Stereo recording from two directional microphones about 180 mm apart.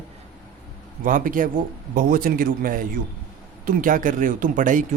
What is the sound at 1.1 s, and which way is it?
A man's voice, 45° right (ahead or behind).